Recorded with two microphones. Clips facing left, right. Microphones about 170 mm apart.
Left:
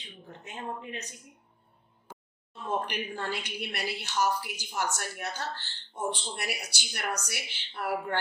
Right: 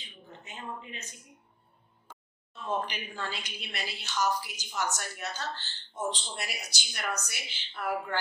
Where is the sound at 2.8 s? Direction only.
60° left (ahead or behind).